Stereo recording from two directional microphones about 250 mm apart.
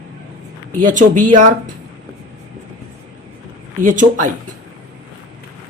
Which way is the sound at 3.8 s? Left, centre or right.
Right.